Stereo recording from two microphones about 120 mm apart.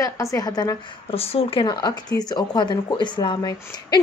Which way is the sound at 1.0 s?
55° left (ahead or behind).